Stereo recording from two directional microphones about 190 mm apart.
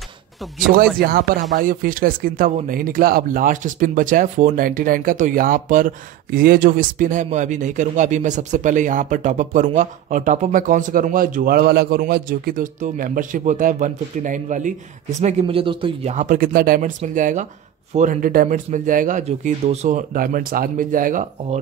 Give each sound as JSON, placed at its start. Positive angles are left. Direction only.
{"t": 1.0, "sound": "speech", "side_deg": -50}